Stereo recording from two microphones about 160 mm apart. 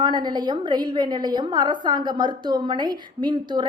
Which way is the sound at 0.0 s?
30° right (ahead or behind).